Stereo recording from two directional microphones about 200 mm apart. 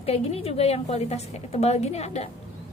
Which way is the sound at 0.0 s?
30° left (ahead or behind).